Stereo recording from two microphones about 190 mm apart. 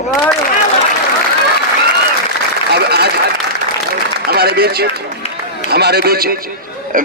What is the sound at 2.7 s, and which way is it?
Speech, 60° right (ahead or behind).